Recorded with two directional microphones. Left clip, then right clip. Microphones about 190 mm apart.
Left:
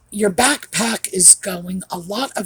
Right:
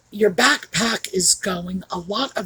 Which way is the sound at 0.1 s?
45° left (ahead or behind).